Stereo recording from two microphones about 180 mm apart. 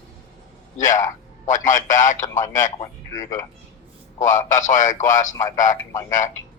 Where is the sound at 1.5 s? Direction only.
45° left (ahead or behind).